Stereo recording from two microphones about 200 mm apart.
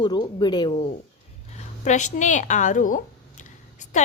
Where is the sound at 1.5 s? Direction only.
35° left (ahead or behind).